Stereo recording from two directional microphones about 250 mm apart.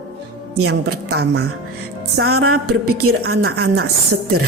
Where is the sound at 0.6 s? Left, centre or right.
Right.